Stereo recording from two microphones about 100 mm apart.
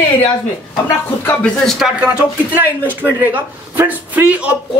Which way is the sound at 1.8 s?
10° right (ahead or behind).